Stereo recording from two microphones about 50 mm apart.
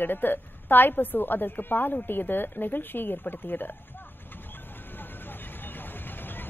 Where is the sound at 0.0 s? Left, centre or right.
Left.